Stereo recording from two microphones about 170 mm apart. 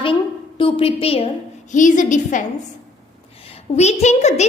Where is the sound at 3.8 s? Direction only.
40° left (ahead or behind).